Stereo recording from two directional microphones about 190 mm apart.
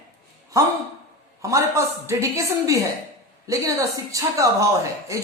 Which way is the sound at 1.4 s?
15° right (ahead or behind).